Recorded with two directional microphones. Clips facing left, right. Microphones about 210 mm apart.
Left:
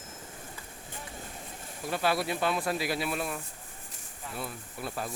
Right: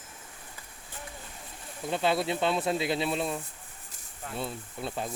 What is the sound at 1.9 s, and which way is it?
Speech, 20° right (ahead or behind).